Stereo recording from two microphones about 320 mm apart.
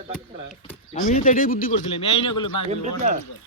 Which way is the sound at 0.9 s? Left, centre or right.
Left.